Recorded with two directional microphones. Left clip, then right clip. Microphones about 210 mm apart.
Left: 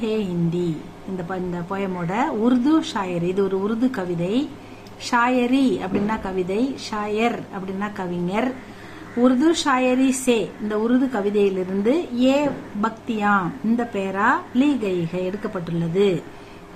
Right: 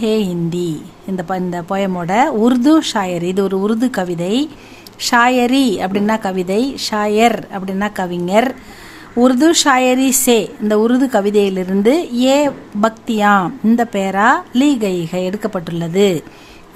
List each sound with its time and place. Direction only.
0.0 s a woman's voice: 55° right (ahead or behind)